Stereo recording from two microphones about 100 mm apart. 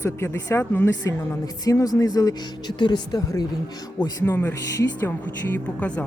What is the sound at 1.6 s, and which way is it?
Speech, 35° left (ahead or behind).